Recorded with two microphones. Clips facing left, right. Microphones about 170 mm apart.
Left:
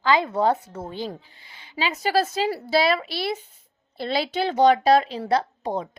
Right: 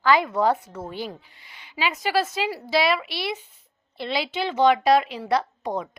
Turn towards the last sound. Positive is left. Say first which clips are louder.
# left 1 dB
turn(degrees=30)  # may be behind; listen again after turning